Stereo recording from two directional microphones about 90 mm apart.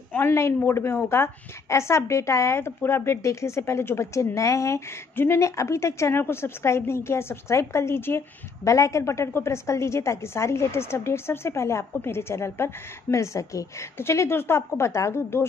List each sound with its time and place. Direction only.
0.1 s a woman's voice: 30° left (ahead or behind)